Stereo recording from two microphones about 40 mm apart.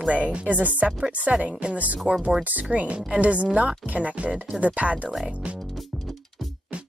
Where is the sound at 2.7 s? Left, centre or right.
Right.